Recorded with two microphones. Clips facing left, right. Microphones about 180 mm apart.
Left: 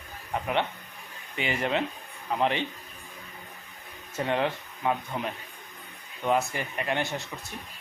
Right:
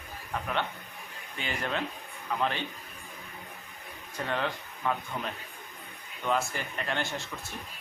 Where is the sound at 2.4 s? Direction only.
20° left (ahead or behind).